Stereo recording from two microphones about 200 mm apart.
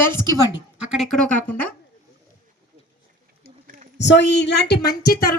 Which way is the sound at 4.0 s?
60° left (ahead or behind).